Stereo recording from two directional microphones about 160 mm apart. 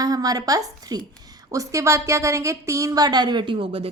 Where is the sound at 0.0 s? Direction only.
25° right (ahead or behind).